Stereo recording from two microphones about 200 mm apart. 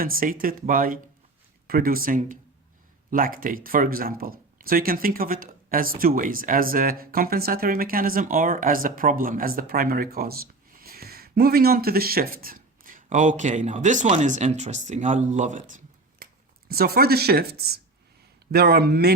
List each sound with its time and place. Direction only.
0.0 s speech: 45° right (ahead or behind)
15.7 s a sound: 45° right (ahead or behind)
18.5 s speech: 50° right (ahead or behind)